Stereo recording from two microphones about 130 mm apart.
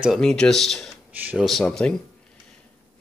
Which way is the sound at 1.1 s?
15° right (ahead or behind).